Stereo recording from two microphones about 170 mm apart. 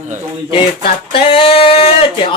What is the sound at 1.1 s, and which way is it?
Speech, 35° left (ahead or behind).